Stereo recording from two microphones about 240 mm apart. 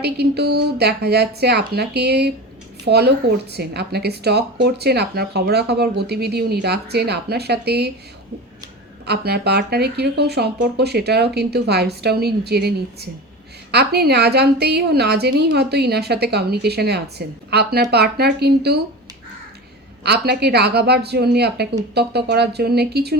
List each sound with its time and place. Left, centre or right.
0.0 s speech: right
9.0 s speech: right
20.1 s speech: right